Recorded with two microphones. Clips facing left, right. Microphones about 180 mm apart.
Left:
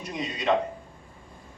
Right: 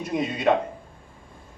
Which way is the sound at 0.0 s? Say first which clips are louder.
Right 6 dB; 55° right (ahead or behind).